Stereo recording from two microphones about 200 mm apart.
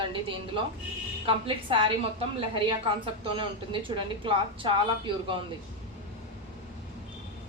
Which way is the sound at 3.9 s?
25° right (ahead or behind).